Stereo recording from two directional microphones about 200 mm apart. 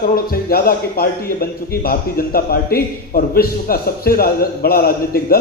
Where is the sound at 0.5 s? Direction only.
50° left (ahead or behind).